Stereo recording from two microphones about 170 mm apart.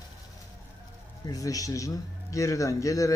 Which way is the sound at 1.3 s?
20° left (ahead or behind).